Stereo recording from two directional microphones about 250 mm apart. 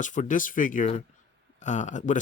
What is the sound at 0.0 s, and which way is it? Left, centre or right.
Speech, left.